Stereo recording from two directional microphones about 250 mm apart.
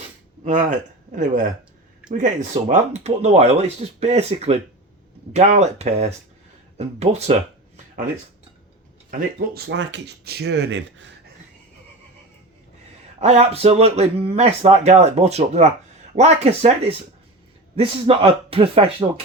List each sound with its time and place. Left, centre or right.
0.4 s speech: right
9.0 s speech: right
13.1 s speech: right
17.7 s speech: right